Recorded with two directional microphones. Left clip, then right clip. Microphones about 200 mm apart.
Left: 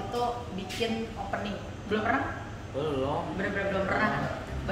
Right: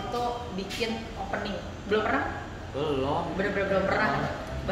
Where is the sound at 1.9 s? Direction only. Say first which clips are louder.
Right 4 dB; 15° left (ahead or behind).